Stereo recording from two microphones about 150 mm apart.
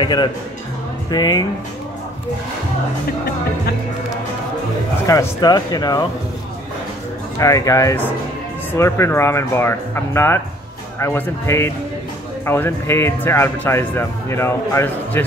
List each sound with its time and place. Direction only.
0.0 s speech: 30° left (ahead or behind)
5.0 s speech: 25° left (ahead or behind)
7.3 s speech: 20° left (ahead or behind)